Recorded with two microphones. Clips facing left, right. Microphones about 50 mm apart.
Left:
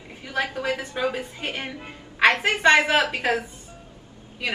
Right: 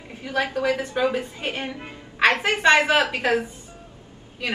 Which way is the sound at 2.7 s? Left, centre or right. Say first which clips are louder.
Right 1 dB; right.